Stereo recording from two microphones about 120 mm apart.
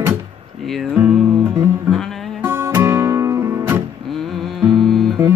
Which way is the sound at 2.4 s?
20° right (ahead or behind).